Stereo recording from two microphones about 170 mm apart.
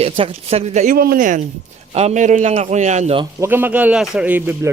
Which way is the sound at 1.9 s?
40° right (ahead or behind).